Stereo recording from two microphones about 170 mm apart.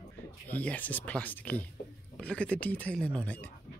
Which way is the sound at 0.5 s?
10° left (ahead or behind).